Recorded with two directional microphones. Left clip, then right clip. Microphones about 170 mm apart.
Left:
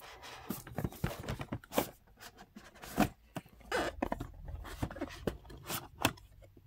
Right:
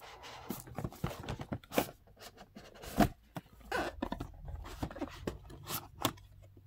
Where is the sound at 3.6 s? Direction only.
25° right (ahead or behind).